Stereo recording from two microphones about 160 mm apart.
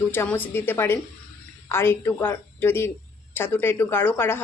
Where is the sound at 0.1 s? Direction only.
10° left (ahead or behind).